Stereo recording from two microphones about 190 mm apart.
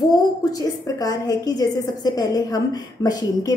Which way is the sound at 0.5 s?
20° left (ahead or behind).